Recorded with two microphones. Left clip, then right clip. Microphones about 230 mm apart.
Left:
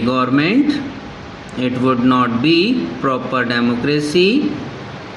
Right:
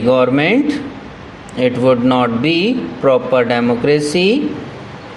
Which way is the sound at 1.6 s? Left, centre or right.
Right.